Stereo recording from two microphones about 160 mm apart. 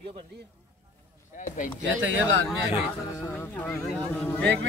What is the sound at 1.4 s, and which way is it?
Speech, 55° left (ahead or behind).